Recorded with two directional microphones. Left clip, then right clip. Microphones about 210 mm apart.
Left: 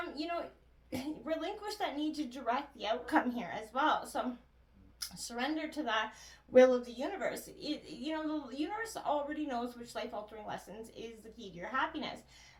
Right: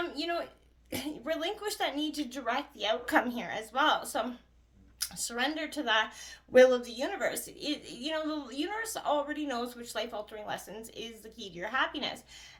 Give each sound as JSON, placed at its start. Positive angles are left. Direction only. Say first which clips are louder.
{"t": 0.1, "sound": "a woman's voice", "louder": "right 4 dB", "side_deg": -35}